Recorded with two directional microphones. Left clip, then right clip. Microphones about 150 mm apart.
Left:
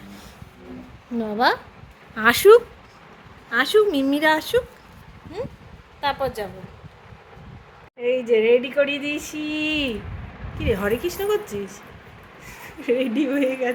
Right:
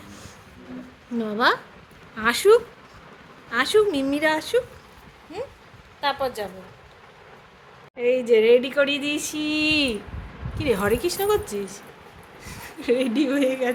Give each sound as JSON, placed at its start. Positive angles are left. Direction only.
{"t": 1.2, "sound": "a sound", "side_deg": 5}
{"t": 2.1, "sound": "a woman's voice", "side_deg": 30}
{"t": 3.5, "sound": "speech", "side_deg": 10}
{"t": 6.0, "sound": "speech", "side_deg": 10}
{"t": 7.9, "sound": "a sound", "side_deg": -5}
{"t": 12.5, "sound": "speech", "side_deg": 0}